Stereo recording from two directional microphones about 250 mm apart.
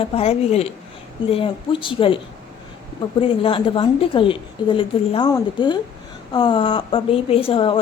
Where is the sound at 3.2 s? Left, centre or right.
Left.